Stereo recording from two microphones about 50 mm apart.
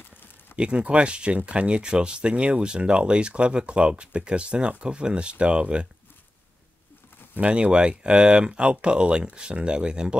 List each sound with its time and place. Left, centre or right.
0.6 s speech: right
7.3 s speech: right